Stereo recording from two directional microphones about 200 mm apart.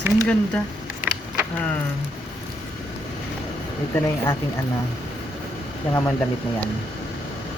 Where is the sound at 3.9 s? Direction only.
15° left (ahead or behind).